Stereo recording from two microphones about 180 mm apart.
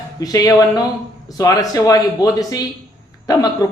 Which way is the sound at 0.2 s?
20° left (ahead or behind).